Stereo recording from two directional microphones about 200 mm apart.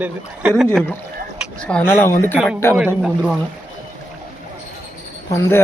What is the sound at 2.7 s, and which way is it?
Speech, 5° right (ahead or behind).